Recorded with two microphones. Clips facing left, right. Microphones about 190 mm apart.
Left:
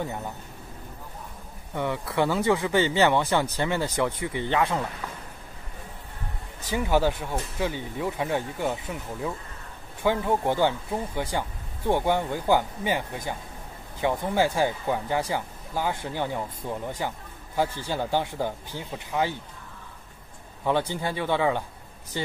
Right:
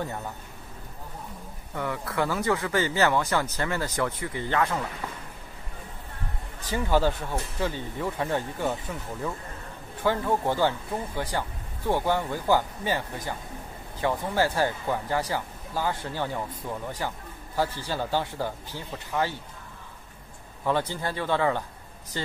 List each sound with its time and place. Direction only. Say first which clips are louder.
1.8 s speech: left 3 dB; 20° left (ahead or behind)
3.5 s speech: left 3 dB; 25° left (ahead or behind)
6.7 s speech: left 1 dB; 15° left (ahead or behind)
20.6 s speech: left 1 dB; 20° left (ahead or behind)